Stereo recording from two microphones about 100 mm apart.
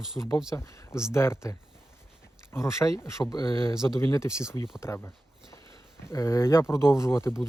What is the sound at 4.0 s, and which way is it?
Speech, 30° left (ahead or behind).